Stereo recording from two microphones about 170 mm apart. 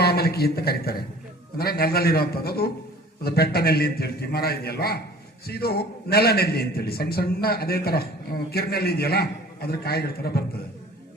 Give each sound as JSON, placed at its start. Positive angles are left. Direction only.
{"t": 0.0, "sound": "a man's voice", "side_deg": 70}